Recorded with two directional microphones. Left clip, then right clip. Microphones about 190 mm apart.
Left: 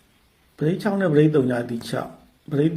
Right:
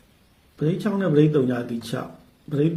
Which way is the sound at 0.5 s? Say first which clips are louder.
Left 2 dB; 10° left (ahead or behind).